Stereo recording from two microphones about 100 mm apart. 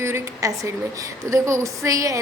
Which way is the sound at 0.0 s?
30° right (ahead or behind).